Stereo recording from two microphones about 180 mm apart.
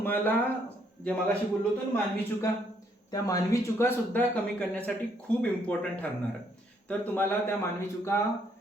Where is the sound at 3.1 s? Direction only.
20° left (ahead or behind).